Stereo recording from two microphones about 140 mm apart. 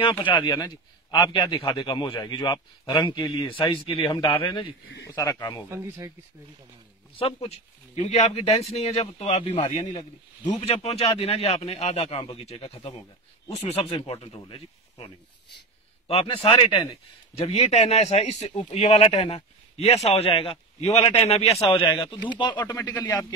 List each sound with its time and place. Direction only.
0.2 s a man's voice: 35° left (ahead or behind)
0.5 s a man's voice: 25° left (ahead or behind)
5.7 s speech: 20° right (ahead or behind)
7.4 s a man's voice: 50° left (ahead or behind); by 17.0 s 35° left (ahead or behind)
17.4 s a man's voice: 50° left (ahead or behind)
22.0 s a man's voice: 35° left (ahead or behind)
22.8 s speech: 20° left (ahead or behind)